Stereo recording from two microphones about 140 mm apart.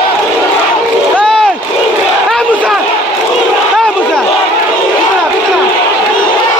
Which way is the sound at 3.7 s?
Centre (ahead or behind).